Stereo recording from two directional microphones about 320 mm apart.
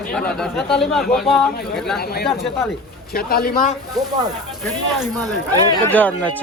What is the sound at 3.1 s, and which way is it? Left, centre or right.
Speech, left.